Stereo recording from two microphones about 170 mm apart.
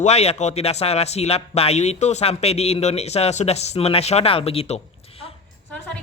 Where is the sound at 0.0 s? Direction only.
40° left (ahead or behind).